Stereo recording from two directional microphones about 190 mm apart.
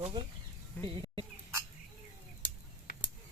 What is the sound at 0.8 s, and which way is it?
Speech, 25° right (ahead or behind).